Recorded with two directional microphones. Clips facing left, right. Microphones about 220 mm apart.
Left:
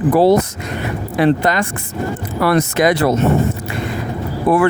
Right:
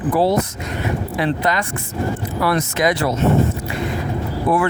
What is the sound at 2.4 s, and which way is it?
Speech, 60° left (ahead or behind).